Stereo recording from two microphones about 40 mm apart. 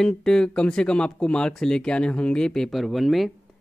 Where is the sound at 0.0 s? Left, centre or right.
Centre.